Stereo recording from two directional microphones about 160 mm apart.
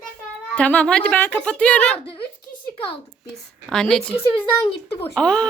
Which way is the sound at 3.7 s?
5° left (ahead or behind).